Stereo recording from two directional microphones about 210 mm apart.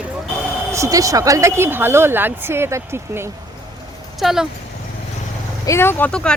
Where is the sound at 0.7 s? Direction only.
15° right (ahead or behind).